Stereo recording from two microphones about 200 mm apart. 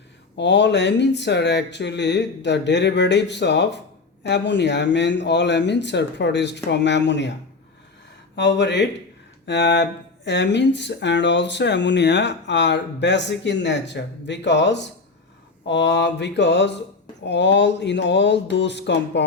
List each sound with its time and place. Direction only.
0.3 s speech: 60° left (ahead or behind)
8.4 s speech: 60° left (ahead or behind)